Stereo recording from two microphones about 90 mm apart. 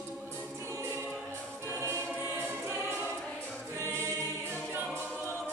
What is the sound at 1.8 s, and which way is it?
Music, 30° right (ahead or behind).